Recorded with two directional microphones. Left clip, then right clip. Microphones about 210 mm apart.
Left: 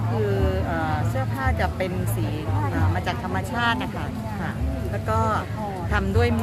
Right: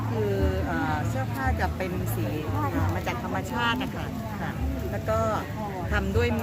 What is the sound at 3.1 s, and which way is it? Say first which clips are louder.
Speech: left 3 dB; 50° left (ahead or behind).